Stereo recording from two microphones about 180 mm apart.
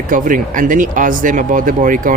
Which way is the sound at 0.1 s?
50° right (ahead or behind).